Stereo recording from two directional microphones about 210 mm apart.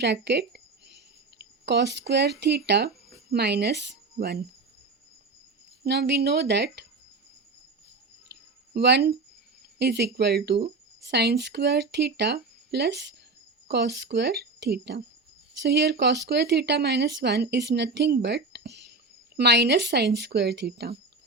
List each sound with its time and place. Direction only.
0.0 s speech: 55° right (ahead or behind)
5.8 s speech: 50° right (ahead or behind)
8.7 s speech: 55° right (ahead or behind)